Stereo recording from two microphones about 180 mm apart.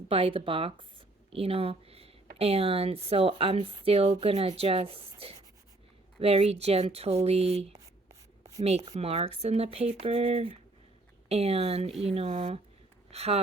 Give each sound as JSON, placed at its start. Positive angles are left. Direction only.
{"t": 0.1, "sound": "speech", "side_deg": -30}
{"t": 11.9, "sound": "speech", "side_deg": 0}
{"t": 12.1, "sound": "speech", "side_deg": -35}